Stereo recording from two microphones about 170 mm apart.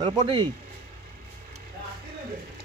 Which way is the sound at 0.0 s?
25° right (ahead or behind).